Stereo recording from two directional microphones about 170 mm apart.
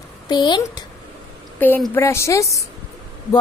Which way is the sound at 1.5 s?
10° left (ahead or behind).